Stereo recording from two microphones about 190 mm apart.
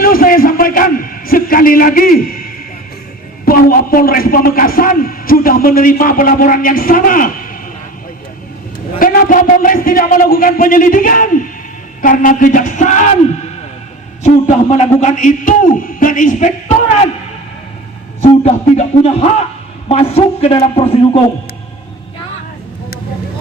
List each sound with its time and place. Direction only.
0.0 s a man's voice: 50° left (ahead or behind)
9.0 s a man's voice: 50° left (ahead or behind)
14.4 s a man's voice: 35° left (ahead or behind)
18.2 s a man's voice: 35° left (ahead or behind)